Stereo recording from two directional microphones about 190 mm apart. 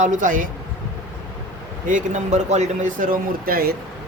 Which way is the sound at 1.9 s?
40° right (ahead or behind).